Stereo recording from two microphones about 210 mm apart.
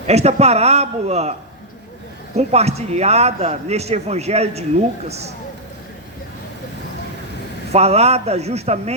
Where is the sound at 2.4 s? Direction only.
30° right (ahead or behind).